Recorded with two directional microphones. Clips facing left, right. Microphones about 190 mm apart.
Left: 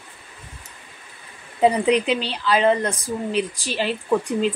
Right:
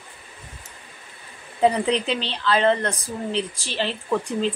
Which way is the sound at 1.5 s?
15° left (ahead or behind).